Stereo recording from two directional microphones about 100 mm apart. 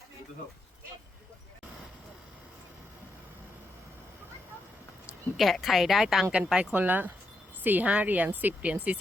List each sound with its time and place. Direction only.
5.4 s a woman's voice: centre (ahead or behind)